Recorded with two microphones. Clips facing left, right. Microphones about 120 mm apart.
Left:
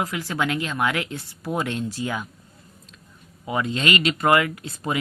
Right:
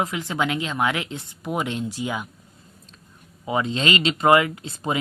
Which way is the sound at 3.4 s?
25° right (ahead or behind).